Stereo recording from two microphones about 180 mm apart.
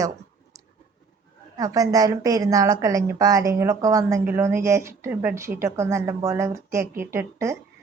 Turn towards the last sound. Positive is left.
turn(degrees=-15)  # may be behind; listen again after turning